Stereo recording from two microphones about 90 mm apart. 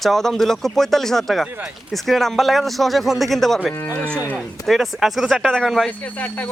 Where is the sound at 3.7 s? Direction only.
25° left (ahead or behind).